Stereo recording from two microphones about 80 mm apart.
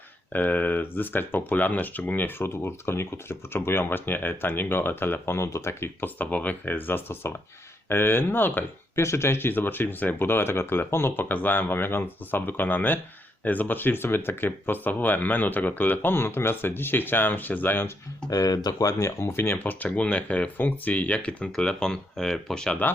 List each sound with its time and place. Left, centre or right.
0.3 s speech: left
6.1 s speech: centre
18.3 s speech: left; by 22.8 s centre